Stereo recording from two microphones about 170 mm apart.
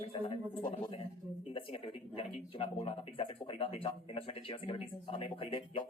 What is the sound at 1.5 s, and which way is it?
Speech, 35° left (ahead or behind).